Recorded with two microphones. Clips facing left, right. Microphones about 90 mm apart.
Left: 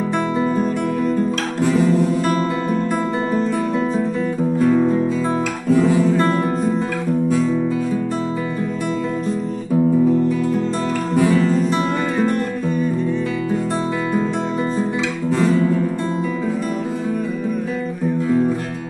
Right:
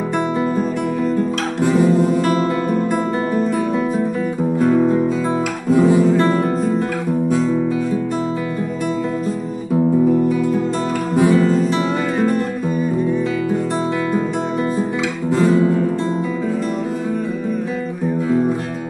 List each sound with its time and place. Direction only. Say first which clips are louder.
5.7 s music: right 2 dB; 20° right (ahead or behind)
6.1 s music: right 2 dB; centre (ahead or behind)
11.1 s music: right 2 dB; 20° right (ahead or behind)
15.3 s guitar: right 3 dB; 20° right (ahead or behind)